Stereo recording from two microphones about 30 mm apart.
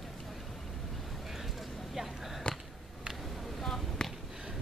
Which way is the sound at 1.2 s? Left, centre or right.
Centre.